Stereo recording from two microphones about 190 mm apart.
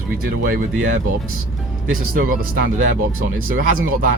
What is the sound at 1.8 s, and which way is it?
Speech, 50° right (ahead or behind).